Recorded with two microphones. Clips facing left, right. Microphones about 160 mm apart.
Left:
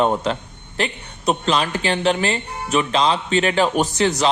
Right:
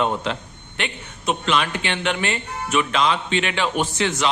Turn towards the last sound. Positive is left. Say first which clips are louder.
# left 4 dB
turn(degrees=35)  # may be behind; listen again after turning